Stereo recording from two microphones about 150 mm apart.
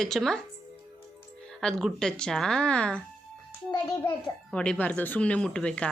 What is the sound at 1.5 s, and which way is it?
A woman's voice, 5° left (ahead or behind).